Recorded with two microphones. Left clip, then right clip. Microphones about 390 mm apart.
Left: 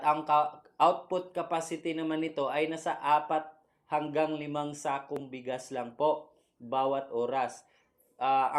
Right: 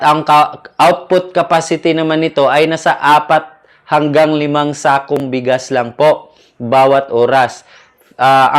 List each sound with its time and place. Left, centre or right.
0.0 s speech: right